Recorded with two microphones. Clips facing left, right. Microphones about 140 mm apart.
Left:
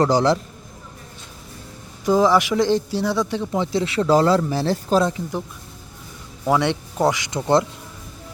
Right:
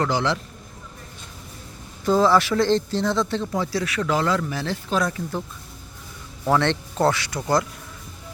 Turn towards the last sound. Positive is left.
turn(degrees=25)  # may be behind; listen again after turning